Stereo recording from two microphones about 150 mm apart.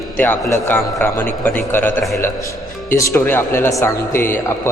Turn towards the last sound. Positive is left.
turn(degrees=15)  # may be behind; listen again after turning